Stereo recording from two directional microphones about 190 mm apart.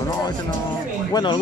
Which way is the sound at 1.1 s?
25° left (ahead or behind).